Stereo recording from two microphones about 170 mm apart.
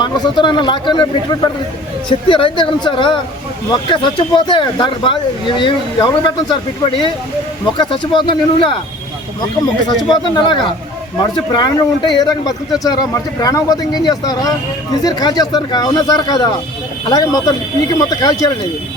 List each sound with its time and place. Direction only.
0.0 s speech: 30° left (ahead or behind)
10.3 s speech: 25° left (ahead or behind)